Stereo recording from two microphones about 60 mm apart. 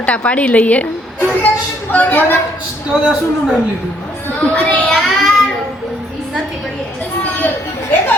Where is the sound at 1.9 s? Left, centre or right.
Left.